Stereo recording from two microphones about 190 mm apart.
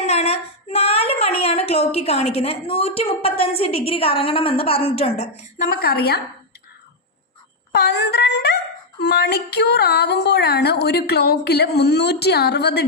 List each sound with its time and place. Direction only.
0.1 s speech: 35° left (ahead or behind)
5.6 s a woman's voice: 50° left (ahead or behind)
7.7 s a woman's voice: 60° left (ahead or behind)